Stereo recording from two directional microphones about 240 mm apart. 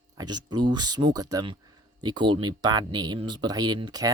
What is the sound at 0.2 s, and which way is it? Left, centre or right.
Speech, centre.